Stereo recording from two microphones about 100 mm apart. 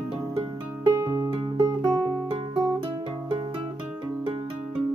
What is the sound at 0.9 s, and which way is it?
Music, 35° right (ahead or behind).